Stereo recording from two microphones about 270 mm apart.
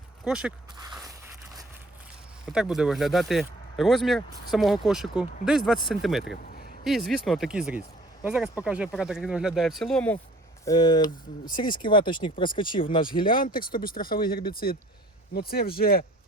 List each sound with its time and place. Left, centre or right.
0.3 s speech: centre
2.5 s speech: centre
6.2 s a sound: left
6.8 s speech: centre
10.7 s speech: centre
13.2 s speech: left